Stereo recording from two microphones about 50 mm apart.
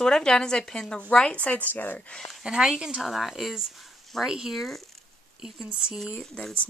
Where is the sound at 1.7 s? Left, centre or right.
Left.